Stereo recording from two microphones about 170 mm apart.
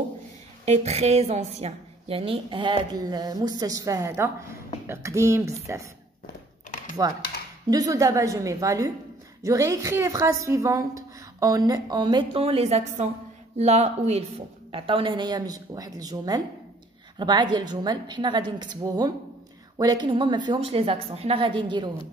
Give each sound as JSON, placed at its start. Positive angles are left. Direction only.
{"t": 0.7, "sound": "a woman's voice", "side_deg": -40}
{"t": 7.0, "sound": "a woman's voice", "side_deg": -20}